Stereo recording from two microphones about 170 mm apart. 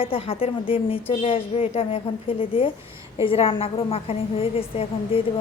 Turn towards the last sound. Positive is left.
turn(degrees=35)  # may be behind; listen again after turning